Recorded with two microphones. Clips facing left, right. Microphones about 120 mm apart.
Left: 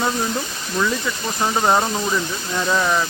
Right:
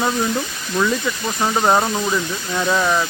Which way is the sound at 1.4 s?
10° right (ahead or behind).